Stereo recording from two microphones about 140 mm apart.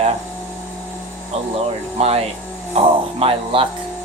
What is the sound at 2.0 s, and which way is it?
Speech, 45° right (ahead or behind).